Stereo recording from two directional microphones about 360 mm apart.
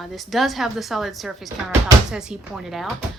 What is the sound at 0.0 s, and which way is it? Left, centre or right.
Speech, centre.